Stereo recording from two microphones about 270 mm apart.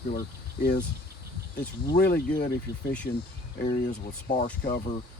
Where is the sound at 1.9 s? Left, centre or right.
Left.